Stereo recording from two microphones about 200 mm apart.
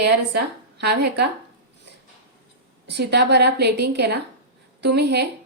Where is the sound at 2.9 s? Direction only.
55° right (ahead or behind).